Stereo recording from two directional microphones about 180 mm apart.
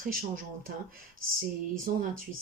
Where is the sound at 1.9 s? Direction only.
50° right (ahead or behind).